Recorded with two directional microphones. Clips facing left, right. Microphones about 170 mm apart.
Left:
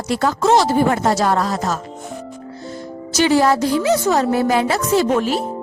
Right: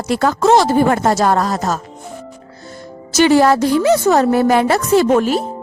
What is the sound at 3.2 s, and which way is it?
A woman's voice, 60° right (ahead or behind).